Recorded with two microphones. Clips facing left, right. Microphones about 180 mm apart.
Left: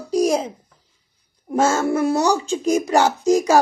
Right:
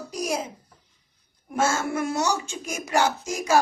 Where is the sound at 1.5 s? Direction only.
40° left (ahead or behind).